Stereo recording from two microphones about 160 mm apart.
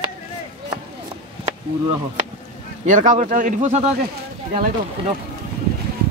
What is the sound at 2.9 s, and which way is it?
Speech, 50° right (ahead or behind).